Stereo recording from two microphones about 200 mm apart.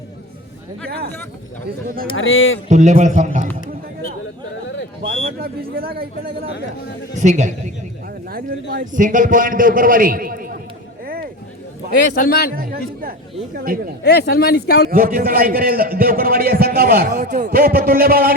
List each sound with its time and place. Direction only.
2.1 s speech: 75° left (ahead or behind)
2.6 s a man's voice: 35° right (ahead or behind)
5.0 s a man's voice: 50° right (ahead or behind)
7.2 s a man's voice: 35° right (ahead or behind)
11.0 s a sound: 50° right (ahead or behind)
12.1 s speech: 50° left (ahead or behind)
12.5 s speech: 45° right (ahead or behind)
14.0 s speech: 55° left (ahead or behind)
14.8 s a man's voice: 45° right (ahead or behind)